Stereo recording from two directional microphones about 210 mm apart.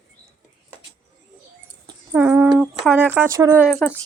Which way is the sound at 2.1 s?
10° right (ahead or behind).